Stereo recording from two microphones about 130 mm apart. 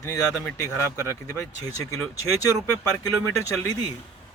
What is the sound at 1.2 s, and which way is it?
Speech, 25° left (ahead or behind).